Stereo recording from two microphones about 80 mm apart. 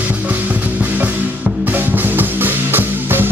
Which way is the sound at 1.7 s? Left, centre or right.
Right.